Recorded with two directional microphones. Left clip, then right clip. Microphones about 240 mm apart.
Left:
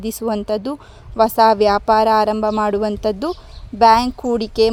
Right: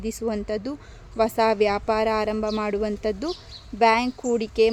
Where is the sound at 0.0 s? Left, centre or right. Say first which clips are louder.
Left 6 dB; left.